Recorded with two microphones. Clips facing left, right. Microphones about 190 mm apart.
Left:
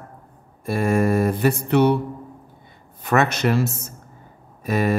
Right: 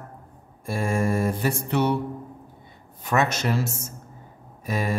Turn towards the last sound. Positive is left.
turn(degrees=65)  # may be behind; listen again after turning